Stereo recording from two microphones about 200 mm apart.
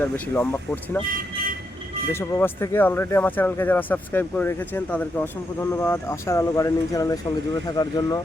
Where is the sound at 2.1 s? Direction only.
10° left (ahead or behind).